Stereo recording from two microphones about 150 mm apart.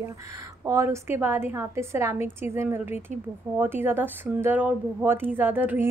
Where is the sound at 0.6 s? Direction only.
20° right (ahead or behind).